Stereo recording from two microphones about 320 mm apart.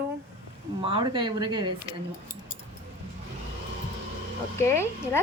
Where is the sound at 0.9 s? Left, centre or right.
Centre.